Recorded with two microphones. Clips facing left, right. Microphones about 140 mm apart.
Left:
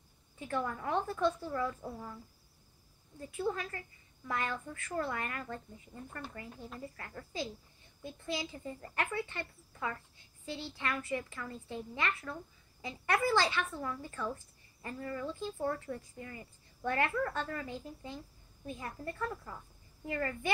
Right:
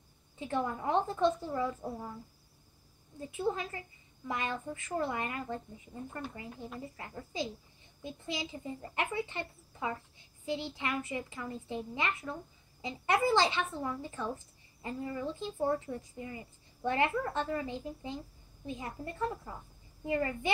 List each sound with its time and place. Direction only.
0.4 s speech: 20° right (ahead or behind)
3.2 s speech: 20° right (ahead or behind)